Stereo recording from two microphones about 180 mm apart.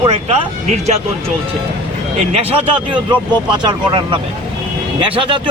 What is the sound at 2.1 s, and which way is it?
Speech, 35° right (ahead or behind).